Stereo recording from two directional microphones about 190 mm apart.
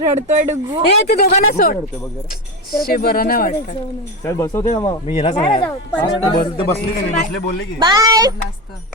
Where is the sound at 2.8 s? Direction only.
50° left (ahead or behind).